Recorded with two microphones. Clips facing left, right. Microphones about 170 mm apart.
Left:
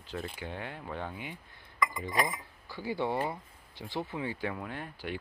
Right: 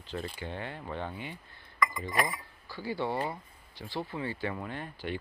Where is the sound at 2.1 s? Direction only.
20° left (ahead or behind).